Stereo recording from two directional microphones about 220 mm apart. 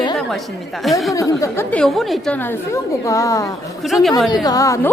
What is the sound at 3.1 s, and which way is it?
Speech, 15° left (ahead or behind).